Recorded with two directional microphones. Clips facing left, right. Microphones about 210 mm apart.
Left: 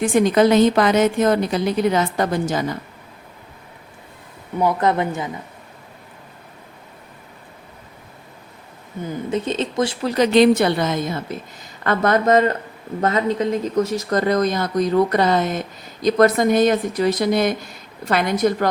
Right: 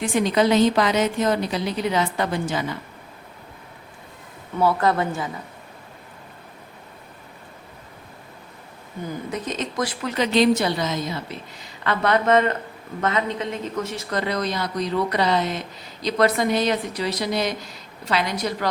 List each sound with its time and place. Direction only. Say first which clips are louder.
0.0 s speech: left 5 dB; 50° left (ahead or behind)
4.6 s a woman's voice: left 1 dB; 20° left (ahead or behind)
9.0 s a woman's voice: left 6 dB; 25° left (ahead or behind)
10.3 s speech: left 4 dB; 55° left (ahead or behind)